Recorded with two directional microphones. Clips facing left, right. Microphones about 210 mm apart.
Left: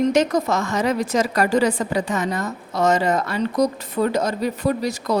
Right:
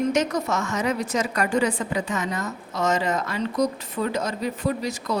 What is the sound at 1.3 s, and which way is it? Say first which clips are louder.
Speech: left 4 dB; 35° left (ahead or behind).